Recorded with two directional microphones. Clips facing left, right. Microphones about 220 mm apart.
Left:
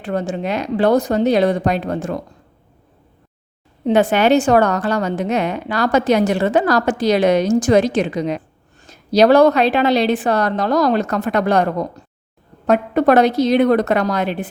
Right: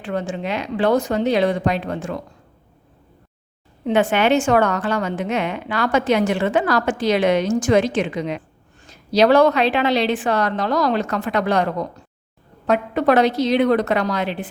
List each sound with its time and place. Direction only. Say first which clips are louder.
0.0 s a woman's voice: left 3 dB; 40° left (ahead or behind)
3.8 s a woman's voice: left 3 dB; 40° left (ahead or behind)